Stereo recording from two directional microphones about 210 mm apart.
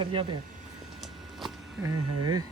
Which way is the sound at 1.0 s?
Centre (ahead or behind).